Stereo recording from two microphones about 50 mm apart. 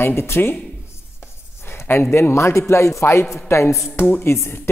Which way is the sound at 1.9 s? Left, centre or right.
Left.